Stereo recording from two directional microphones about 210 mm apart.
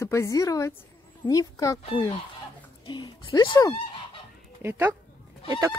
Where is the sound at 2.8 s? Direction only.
25° left (ahead or behind).